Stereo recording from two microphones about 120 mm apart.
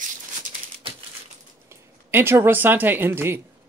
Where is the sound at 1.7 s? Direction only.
20° right (ahead or behind).